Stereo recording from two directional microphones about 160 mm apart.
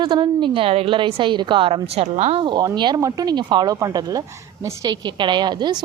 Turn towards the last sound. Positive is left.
turn(degrees=-25)  # may be behind; listen again after turning